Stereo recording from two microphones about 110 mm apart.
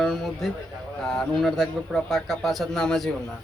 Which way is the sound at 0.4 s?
Centre (ahead or behind).